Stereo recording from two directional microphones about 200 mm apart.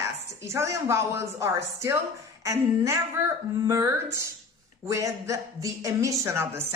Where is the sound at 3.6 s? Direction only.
15° right (ahead or behind).